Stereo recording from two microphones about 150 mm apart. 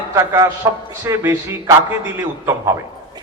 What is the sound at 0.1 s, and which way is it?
A man's voice, 20° right (ahead or behind).